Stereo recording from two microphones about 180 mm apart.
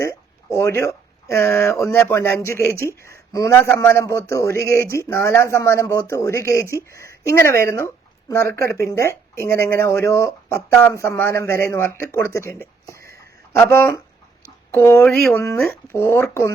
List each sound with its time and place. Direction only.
0.5 s speech: 15° left (ahead or behind)
13.1 s a sound: 15° left (ahead or behind)
14.7 s speech: 15° left (ahead or behind)
15.4 s speech: 15° left (ahead or behind)